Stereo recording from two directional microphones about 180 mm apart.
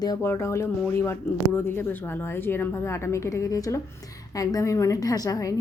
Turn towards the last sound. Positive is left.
turn(degrees=20)  # may be behind; listen again after turning